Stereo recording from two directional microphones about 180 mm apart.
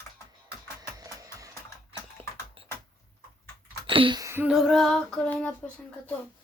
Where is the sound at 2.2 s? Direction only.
30° right (ahead or behind).